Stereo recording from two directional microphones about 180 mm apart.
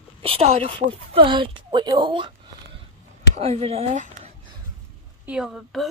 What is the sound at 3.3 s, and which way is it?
Speech, 35° right (ahead or behind).